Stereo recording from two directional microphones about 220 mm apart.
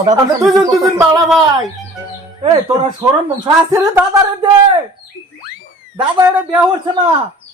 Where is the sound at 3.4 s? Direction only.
15° right (ahead or behind).